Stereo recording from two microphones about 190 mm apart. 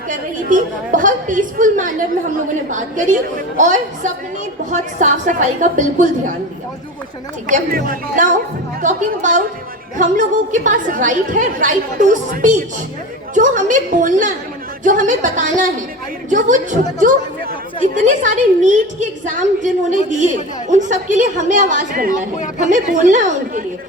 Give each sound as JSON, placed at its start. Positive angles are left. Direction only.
{"t": 0.1, "sound": "a woman's voice", "side_deg": -45}
{"t": 7.4, "sound": "a woman's voice", "side_deg": -45}